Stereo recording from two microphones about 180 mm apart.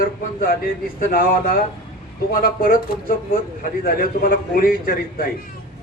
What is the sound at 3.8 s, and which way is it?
A man's voice, 55° left (ahead or behind).